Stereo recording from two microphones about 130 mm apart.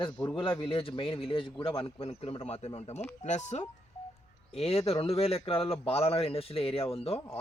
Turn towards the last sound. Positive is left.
turn(degrees=50)  # may be behind; listen again after turning